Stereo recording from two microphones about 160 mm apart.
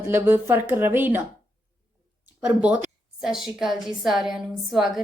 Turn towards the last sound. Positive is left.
turn(degrees=0)  # may be behind; listen again after turning